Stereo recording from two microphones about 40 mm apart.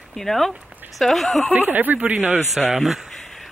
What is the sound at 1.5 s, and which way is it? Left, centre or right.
Speech, right.